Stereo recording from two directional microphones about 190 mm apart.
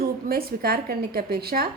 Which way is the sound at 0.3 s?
50° right (ahead or behind).